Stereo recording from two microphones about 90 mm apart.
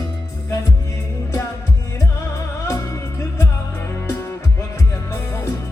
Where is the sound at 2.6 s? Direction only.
35° left (ahead or behind).